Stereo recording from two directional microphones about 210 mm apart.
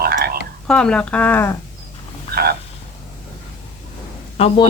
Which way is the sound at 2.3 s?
45° right (ahead or behind).